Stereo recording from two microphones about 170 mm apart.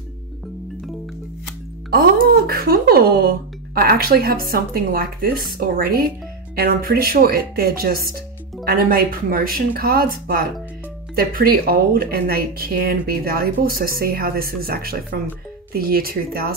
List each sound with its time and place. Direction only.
1.9 s speech: 60° right (ahead or behind)